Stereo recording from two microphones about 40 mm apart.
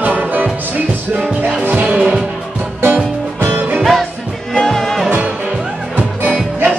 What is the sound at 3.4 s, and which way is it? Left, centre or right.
Music, right.